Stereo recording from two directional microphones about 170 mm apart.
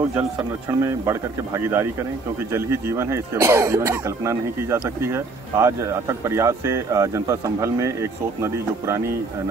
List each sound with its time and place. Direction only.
0.1 s speech: 15° right (ahead or behind)